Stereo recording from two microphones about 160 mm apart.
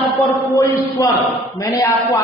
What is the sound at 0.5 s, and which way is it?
A man's voice, 20° left (ahead or behind).